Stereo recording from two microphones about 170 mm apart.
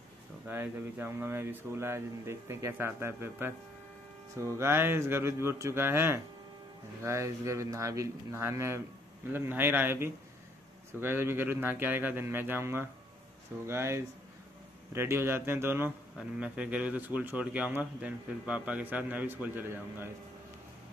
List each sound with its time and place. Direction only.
0.5 s a man's voice: 10° right (ahead or behind)